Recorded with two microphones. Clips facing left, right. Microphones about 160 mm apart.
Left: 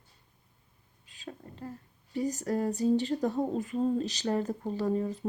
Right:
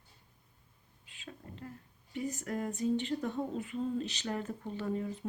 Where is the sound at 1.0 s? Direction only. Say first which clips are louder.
Left 5 dB; 35° left (ahead or behind).